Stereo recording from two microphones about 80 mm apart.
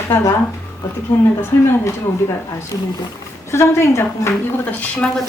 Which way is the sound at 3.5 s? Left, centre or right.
Left.